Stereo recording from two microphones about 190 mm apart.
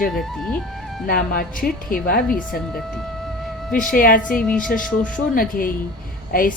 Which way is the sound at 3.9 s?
50° left (ahead or behind).